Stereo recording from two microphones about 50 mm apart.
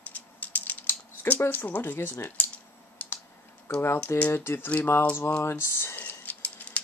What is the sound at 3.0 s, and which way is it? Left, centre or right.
Computer keyboard, left.